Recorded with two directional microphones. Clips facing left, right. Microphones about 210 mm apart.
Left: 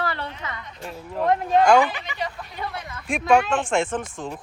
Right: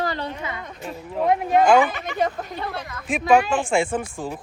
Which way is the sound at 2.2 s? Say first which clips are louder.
Right 10 dB; 50° right (ahead or behind).